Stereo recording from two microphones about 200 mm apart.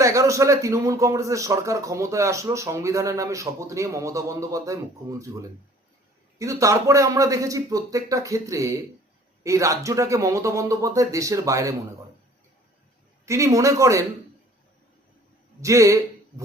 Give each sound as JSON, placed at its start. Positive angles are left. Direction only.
{"t": 0.0, "sound": "a man's voice", "side_deg": -15}
{"t": 13.2, "sound": "a man's voice", "side_deg": -15}
{"t": 15.6, "sound": "a man's voice", "side_deg": -15}